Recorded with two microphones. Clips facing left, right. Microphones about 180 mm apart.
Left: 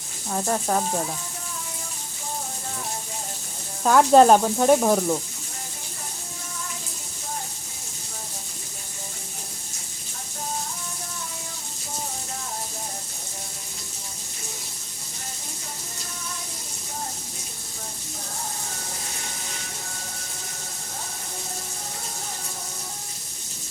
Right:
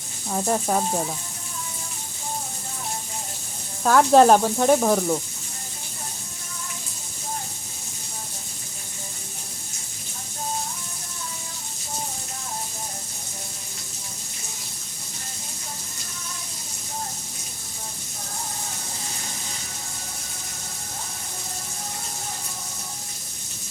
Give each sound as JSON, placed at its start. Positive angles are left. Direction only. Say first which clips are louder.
{"t": 0.3, "sound": "speech", "louder": "right 1 dB", "side_deg": -5}
{"t": 3.8, "sound": "speech", "louder": "even", "side_deg": 0}